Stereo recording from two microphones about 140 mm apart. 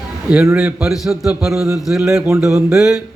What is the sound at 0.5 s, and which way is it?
A man's voice, 5° right (ahead or behind).